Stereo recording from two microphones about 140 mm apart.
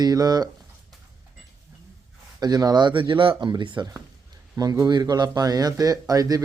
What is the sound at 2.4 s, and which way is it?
Speech, 25° right (ahead or behind).